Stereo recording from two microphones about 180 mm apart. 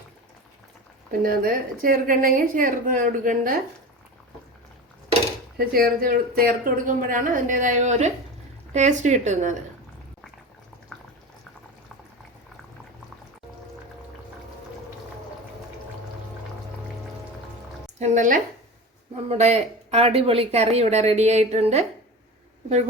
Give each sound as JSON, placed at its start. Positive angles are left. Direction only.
{"t": 1.2, "sound": "speech", "side_deg": -55}
{"t": 5.5, "sound": "speech", "side_deg": -55}
{"t": 18.0, "sound": "speech", "side_deg": -45}